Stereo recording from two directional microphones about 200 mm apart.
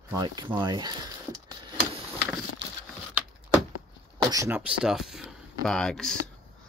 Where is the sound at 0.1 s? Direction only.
20° right (ahead or behind).